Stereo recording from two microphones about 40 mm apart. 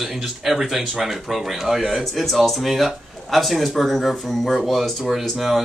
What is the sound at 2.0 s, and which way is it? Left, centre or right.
Speech, centre.